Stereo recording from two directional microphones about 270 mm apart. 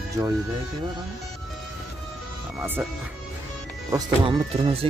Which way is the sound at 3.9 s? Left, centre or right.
Centre.